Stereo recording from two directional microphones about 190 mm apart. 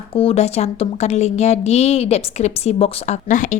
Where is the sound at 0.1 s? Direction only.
30° left (ahead or behind).